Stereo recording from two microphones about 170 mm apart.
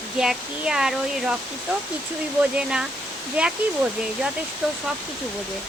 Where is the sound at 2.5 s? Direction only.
5° right (ahead or behind).